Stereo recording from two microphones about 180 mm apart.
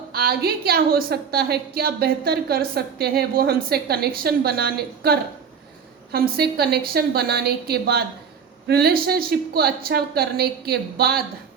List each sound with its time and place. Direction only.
0.1 s a woman's voice: 60° right (ahead or behind)